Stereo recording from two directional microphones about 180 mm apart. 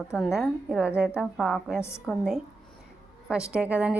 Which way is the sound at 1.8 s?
15° left (ahead or behind).